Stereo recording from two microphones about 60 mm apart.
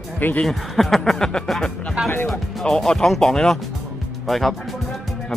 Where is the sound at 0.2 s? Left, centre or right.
Left.